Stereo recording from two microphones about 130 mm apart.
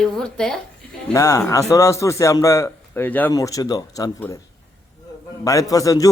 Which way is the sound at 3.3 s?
25° left (ahead or behind).